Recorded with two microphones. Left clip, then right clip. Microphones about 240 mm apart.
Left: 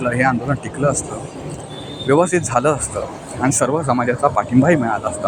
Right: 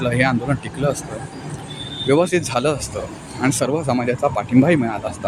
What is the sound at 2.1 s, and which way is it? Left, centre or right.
Speech, centre.